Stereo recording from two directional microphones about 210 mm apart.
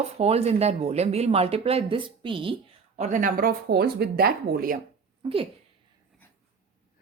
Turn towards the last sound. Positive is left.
turn(degrees=-25)  # may be behind; listen again after turning